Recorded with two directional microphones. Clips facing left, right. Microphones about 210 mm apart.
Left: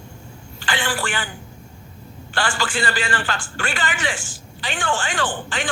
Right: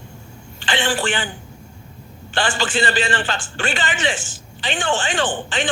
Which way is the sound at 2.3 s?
20° right (ahead or behind).